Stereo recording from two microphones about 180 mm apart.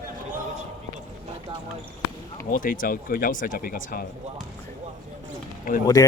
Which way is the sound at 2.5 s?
50° left (ahead or behind).